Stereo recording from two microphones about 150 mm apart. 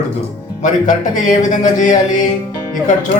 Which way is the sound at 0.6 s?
60° left (ahead or behind).